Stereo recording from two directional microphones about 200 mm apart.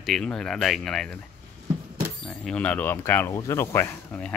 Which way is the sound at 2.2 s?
5° left (ahead or behind).